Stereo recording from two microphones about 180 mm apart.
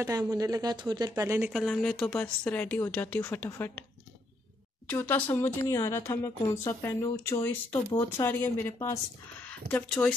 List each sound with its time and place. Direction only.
0.0 s speech: 20° right (ahead or behind)
1.5 s speech: centre (ahead or behind)
4.8 s speech: 10° left (ahead or behind)